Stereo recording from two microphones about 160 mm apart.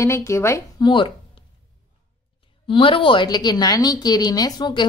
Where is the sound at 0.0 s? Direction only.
15° left (ahead or behind).